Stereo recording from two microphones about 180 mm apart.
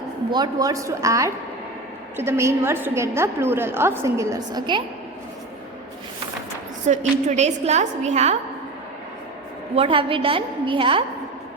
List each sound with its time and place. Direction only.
0.3 s a woman's voice: 25° right (ahead or behind)
6.9 s a woman's voice: 40° right (ahead or behind)
9.7 s a woman's voice: 30° right (ahead or behind)